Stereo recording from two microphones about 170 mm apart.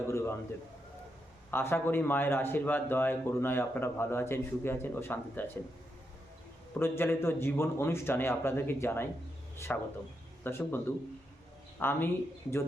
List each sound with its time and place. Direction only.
0.1 s a sound: 15° left (ahead or behind)
1.5 s a man's voice: 10° left (ahead or behind)
6.7 s a man's voice: 15° left (ahead or behind)
11.8 s a man's voice: 10° left (ahead or behind)